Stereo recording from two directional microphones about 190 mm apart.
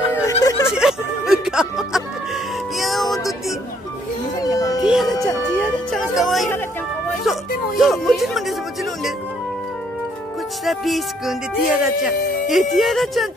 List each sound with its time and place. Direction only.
0.1 s a sound: 15° left (ahead or behind)
0.7 s music: centre (ahead or behind)
4.4 s music: 20° left (ahead or behind)
4.7 s music: centre (ahead or behind)
10.6 s speech: centre (ahead or behind)